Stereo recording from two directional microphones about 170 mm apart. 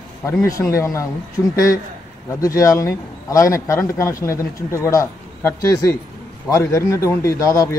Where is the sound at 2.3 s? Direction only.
20° left (ahead or behind).